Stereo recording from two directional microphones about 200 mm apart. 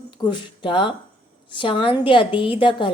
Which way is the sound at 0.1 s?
25° left (ahead or behind).